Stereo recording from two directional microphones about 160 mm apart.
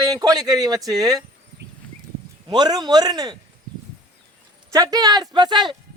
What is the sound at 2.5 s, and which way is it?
Speech, 25° right (ahead or behind).